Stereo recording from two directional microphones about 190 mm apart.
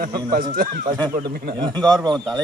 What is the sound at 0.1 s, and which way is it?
Speech, 20° right (ahead or behind).